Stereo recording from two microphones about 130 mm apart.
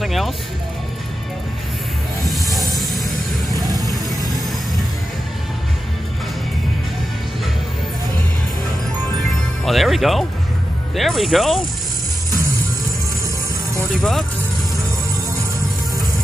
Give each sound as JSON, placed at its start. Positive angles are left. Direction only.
{"t": 0.0, "sound": "music", "side_deg": 0}
{"t": 2.2, "sound": "music", "side_deg": 0}
{"t": 3.5, "sound": "music", "side_deg": -30}
{"t": 9.7, "sound": "music", "side_deg": 0}
{"t": 11.0, "sound": "speech", "side_deg": 0}